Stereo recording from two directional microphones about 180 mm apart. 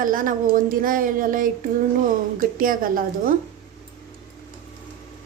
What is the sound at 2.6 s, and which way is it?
Speech, 50° right (ahead or behind).